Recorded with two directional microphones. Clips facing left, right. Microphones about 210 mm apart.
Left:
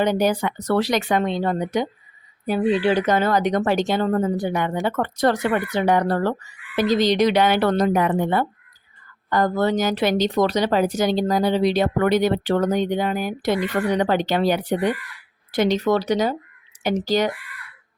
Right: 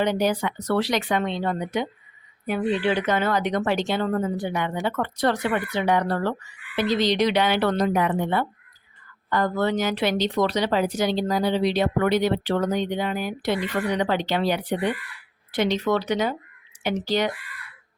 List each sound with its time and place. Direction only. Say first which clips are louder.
0.0 s speech: left 3 dB; 45° left (ahead or behind)